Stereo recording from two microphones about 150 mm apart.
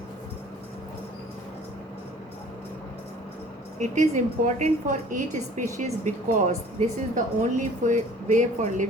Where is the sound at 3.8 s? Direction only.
55° right (ahead or behind).